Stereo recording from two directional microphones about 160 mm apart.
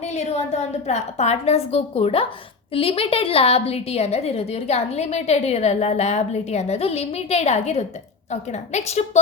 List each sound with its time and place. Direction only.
0.0 s a woman's voice: 45° left (ahead or behind)